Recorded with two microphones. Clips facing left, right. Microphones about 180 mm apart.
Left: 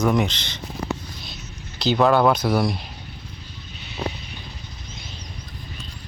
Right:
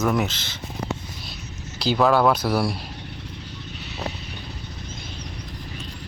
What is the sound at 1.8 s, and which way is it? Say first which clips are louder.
Speech: left 1 dB; 5° right (ahead or behind).